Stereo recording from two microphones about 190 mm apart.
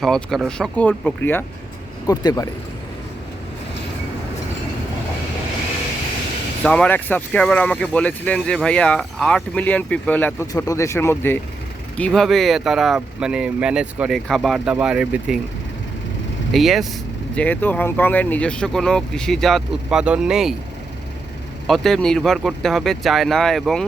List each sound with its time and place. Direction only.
0.0 s speech: centre (ahead or behind); by 2.5 s 20° left (ahead or behind)
6.6 s speech: 5° left (ahead or behind)
16.5 s speech: centre (ahead or behind)
21.7 s speech: centre (ahead or behind)